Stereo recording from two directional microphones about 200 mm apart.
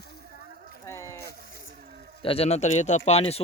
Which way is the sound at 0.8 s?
15° left (ahead or behind).